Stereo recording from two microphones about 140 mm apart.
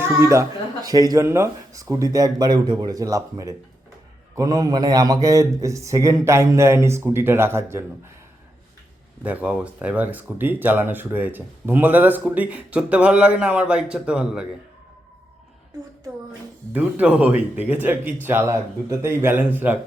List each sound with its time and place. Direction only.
0.0 s a man's voice: 20° right (ahead or behind)
9.2 s speech: 10° right (ahead or behind)
16.7 s speech: 10° right (ahead or behind)